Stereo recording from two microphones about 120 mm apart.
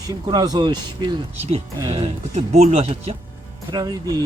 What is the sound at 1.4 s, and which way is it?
Speech, 65° right (ahead or behind).